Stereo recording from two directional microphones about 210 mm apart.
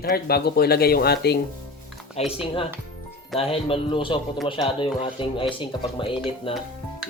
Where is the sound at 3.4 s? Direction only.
25° left (ahead or behind).